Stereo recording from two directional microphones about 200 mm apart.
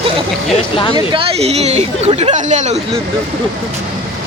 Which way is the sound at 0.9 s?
30° right (ahead or behind).